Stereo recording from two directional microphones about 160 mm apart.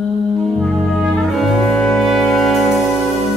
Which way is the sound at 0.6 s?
5° left (ahead or behind).